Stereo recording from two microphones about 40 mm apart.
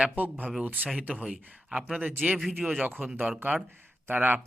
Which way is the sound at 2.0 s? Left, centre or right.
Right.